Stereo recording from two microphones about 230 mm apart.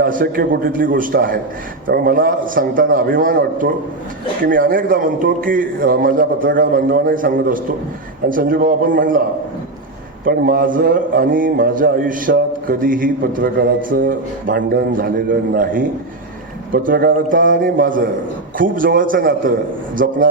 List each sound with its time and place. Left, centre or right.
0.0 s a man's voice: right
10.2 s a man's voice: right